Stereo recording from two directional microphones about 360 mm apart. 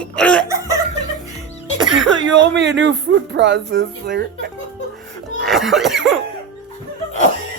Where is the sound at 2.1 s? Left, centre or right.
Right.